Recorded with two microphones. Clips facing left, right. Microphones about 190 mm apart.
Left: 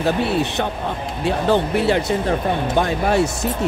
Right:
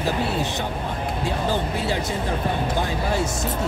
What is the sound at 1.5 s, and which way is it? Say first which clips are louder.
Speech: left 10 dB; 65° left (ahead or behind).